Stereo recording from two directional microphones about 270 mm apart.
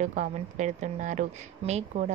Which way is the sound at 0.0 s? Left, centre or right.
Right.